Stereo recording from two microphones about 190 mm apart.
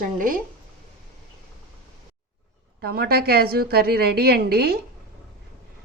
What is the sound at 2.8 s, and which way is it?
A woman's voice, 55° right (ahead or behind).